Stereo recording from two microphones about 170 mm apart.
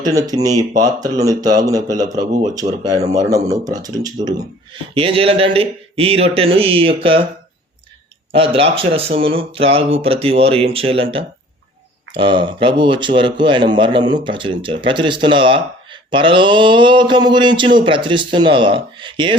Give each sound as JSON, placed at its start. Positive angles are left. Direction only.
{"t": 0.0, "sound": "a man's voice", "side_deg": -20}
{"t": 2.6, "sound": "speech", "side_deg": -45}
{"t": 3.1, "sound": "speech", "side_deg": -20}
{"t": 8.3, "sound": "a man's voice", "side_deg": -30}